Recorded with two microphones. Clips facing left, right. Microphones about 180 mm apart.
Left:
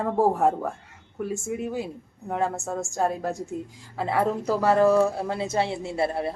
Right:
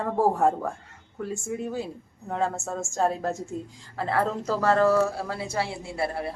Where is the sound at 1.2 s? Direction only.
20° left (ahead or behind).